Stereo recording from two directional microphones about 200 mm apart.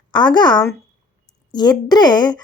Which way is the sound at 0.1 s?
20° left (ahead or behind).